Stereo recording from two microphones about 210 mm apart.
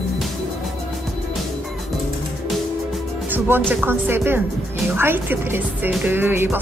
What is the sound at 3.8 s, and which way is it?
Speech, 10° right (ahead or behind).